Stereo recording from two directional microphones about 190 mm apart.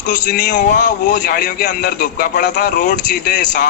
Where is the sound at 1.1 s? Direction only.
55° left (ahead or behind).